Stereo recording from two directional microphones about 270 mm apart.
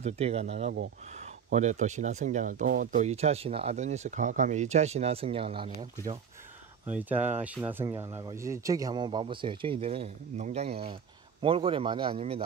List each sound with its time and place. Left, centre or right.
0.0 s speech: right
6.9 s speech: centre